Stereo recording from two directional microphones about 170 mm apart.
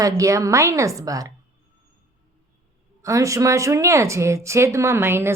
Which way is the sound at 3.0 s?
20° right (ahead or behind).